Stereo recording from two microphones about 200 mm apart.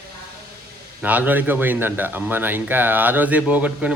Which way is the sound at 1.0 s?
10° right (ahead or behind).